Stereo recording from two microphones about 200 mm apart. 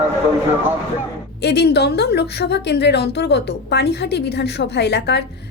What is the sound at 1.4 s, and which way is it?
A woman's voice, 55° left (ahead or behind).